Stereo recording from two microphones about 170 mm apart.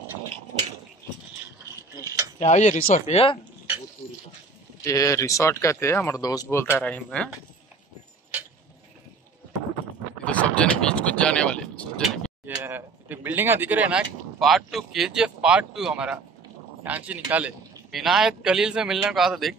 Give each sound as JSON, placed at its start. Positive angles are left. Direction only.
{"t": 2.3, "sound": "speech", "side_deg": 40}
{"t": 4.8, "sound": "speech", "side_deg": 20}
{"t": 6.8, "sound": "a man's voice", "side_deg": 5}
{"t": 10.2, "sound": "speech", "side_deg": 5}
{"t": 12.5, "sound": "a man's voice", "side_deg": -15}